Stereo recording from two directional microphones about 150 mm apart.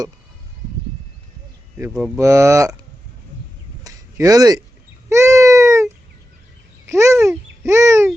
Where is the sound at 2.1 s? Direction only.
20° right (ahead or behind).